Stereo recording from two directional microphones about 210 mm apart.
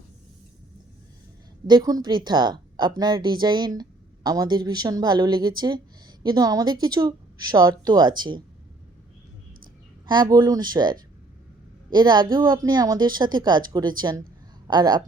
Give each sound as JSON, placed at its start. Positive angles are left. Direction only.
{"t": 1.6, "sound": "a woman's voice", "side_deg": -20}
{"t": 10.1, "sound": "a woman's voice", "side_deg": -20}